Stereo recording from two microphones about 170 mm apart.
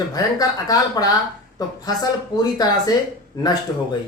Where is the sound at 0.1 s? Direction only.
20° left (ahead or behind).